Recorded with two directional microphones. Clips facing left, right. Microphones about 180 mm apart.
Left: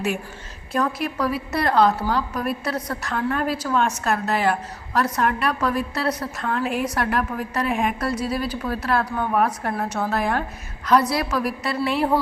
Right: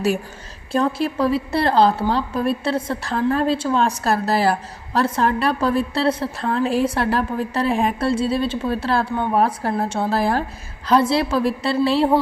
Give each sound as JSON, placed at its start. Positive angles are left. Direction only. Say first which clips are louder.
{"t": 0.7, "sound": "a woman's voice", "louder": "right 4 dB", "side_deg": -30}